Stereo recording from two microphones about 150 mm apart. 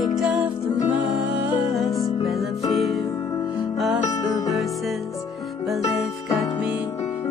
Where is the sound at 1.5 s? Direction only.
10° right (ahead or behind).